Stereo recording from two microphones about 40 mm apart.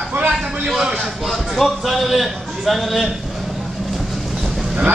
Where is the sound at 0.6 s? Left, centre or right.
Centre.